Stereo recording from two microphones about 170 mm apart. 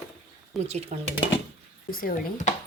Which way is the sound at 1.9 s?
55° left (ahead or behind).